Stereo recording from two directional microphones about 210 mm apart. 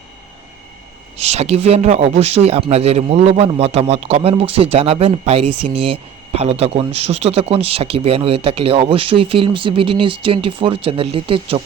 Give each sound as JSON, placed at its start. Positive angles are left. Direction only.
{"t": 1.1, "sound": "a man's voice", "side_deg": -30}